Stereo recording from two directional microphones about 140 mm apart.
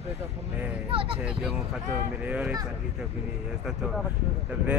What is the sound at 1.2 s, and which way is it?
Speech, 5° right (ahead or behind).